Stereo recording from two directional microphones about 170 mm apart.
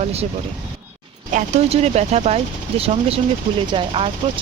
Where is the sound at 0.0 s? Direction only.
35° right (ahead or behind).